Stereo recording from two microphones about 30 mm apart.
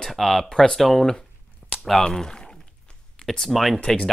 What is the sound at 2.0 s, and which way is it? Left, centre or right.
Speech, left.